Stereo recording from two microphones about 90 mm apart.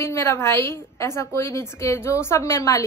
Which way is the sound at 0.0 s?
30° left (ahead or behind).